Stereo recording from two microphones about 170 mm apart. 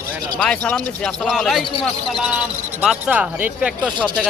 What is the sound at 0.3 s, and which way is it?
Speech, 5° left (ahead or behind).